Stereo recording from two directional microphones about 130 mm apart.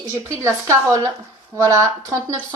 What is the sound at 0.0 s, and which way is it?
Speech, 20° right (ahead or behind).